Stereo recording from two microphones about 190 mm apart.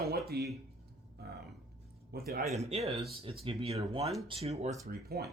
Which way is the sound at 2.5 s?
35° right (ahead or behind).